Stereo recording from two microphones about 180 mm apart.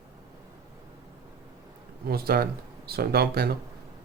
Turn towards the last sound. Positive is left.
turn(degrees=-60)  # may be behind; listen again after turning